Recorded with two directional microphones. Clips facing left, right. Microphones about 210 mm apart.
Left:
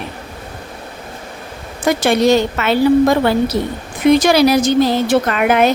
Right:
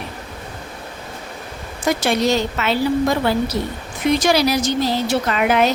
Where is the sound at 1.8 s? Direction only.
55° left (ahead or behind).